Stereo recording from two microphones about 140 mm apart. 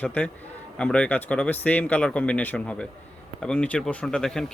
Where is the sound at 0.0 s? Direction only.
10° left (ahead or behind).